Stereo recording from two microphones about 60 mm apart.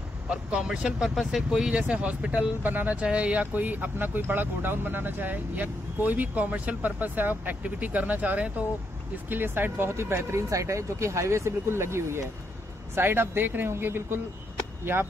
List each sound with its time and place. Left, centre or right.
0.3 s speech: centre
9.3 s speech: right